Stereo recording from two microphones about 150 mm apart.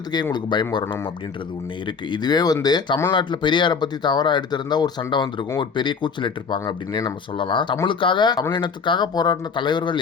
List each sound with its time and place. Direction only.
0.1 s speech: 30° left (ahead or behind)
2.0 s speech: 30° left (ahead or behind)